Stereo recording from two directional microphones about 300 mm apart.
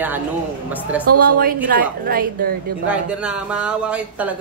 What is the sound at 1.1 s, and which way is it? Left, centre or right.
A woman's voice, right.